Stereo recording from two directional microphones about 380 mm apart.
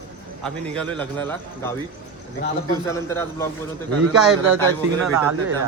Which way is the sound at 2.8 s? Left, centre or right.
Centre.